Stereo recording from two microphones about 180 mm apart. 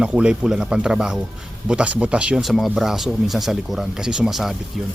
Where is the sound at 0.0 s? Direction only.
5° right (ahead or behind).